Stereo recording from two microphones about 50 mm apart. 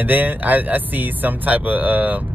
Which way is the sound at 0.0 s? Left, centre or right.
Right.